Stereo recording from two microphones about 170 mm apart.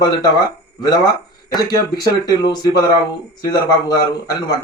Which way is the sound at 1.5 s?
20° left (ahead or behind).